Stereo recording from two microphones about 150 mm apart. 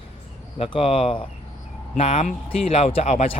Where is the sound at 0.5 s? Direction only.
40° left (ahead or behind).